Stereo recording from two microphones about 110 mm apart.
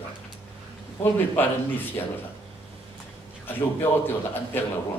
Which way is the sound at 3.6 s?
20° left (ahead or behind).